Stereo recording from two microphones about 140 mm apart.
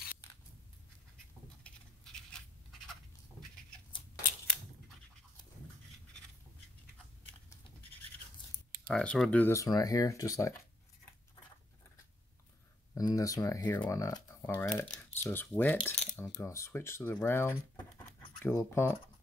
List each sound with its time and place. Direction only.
1.6 s a sound: 5° left (ahead or behind)
8.8 s speech: 5° left (ahead or behind); by 10.5 s 25° left (ahead or behind)
12.9 s speech: 25° left (ahead or behind)
15.9 s cutlery: 50° left (ahead or behind)
16.2 s speech: 20° left (ahead or behind)